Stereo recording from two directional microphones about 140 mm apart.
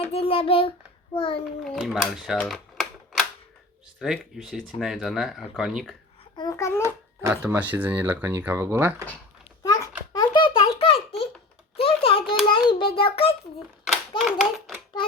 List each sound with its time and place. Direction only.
0.0 s speech: 45° left (ahead or behind)
1.7 s speech: centre (ahead or behind)
2.4 s typewriter: centre (ahead or behind)
4.0 s speech: centre (ahead or behind)
6.3 s a child's voice: 25° left (ahead or behind)
7.2 s speech: 10° right (ahead or behind)
9.6 s a sound: 30° left (ahead or behind)
14.2 s speech: 5° right (ahead or behind)